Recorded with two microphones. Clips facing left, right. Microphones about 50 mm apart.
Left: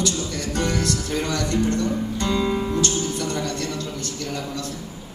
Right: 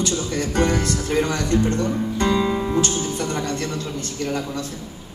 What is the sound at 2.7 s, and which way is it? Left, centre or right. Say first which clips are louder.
Music: right 2 dB; right.